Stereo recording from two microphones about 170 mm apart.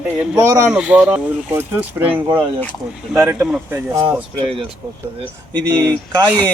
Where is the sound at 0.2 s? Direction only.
5° right (ahead or behind).